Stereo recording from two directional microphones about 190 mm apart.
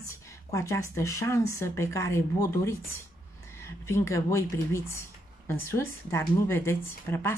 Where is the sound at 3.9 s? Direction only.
15° left (ahead or behind).